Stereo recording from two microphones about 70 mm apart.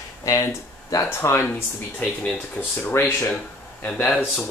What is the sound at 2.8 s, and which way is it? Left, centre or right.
Speech, left.